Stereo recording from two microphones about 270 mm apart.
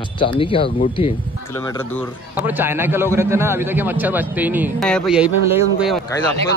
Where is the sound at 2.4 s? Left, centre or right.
Centre.